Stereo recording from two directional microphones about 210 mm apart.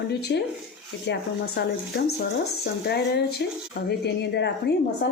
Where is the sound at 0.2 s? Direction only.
50° left (ahead or behind).